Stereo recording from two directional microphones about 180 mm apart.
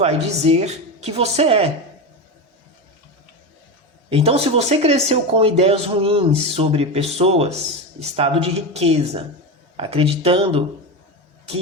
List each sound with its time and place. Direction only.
0.0 s speech: 35° right (ahead or behind)
4.1 s speech: 35° right (ahead or behind)